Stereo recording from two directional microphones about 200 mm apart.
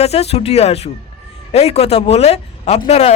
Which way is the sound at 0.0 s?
30° left (ahead or behind).